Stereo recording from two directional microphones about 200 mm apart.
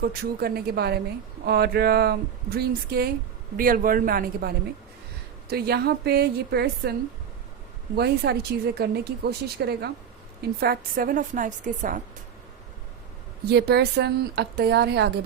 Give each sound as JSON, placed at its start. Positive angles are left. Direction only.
{"t": 0.0, "sound": "a woman's voice", "side_deg": -50}
{"t": 7.9, "sound": "a woman's voice", "side_deg": -55}
{"t": 13.5, "sound": "a woman's voice", "side_deg": -55}